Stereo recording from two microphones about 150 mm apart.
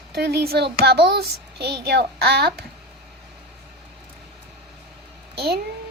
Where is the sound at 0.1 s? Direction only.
90° right.